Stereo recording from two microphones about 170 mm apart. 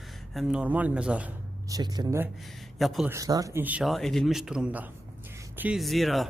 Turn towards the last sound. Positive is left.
turn(degrees=0)  # may be behind; listen again after turning